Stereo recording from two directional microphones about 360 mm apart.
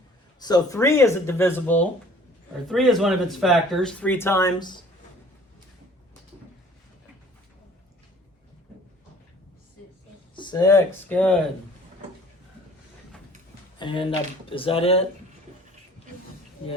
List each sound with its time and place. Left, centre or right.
0.3 s speech: centre
10.3 s speech: centre
13.7 s speech: centre